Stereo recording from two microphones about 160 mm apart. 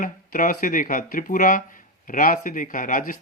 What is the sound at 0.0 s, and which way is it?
Speech, 55° left (ahead or behind).